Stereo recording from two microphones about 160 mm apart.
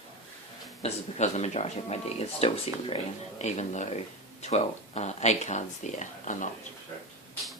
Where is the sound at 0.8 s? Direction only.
45° left (ahead or behind).